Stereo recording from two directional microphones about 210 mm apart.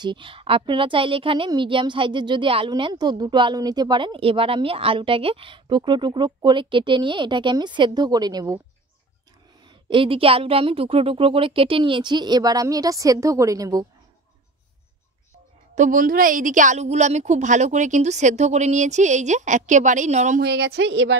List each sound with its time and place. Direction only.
0.0 s a woman's voice: 25° right (ahead or behind)
9.7 s a woman's voice: 25° right (ahead or behind)
15.7 s a woman's voice: 40° right (ahead or behind)
20.4 s speech: 55° right (ahead or behind)